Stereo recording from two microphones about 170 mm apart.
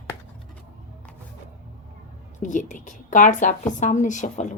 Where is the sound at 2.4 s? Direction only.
45° left (ahead or behind).